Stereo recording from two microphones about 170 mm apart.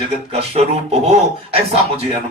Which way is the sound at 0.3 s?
40° right (ahead or behind).